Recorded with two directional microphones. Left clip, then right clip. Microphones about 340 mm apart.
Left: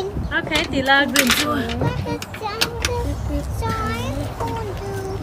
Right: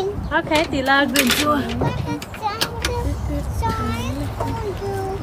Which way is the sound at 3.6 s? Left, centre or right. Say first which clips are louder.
Right 1 dB; centre.